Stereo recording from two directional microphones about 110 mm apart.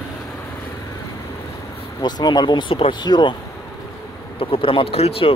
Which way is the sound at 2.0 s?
40° left (ahead or behind).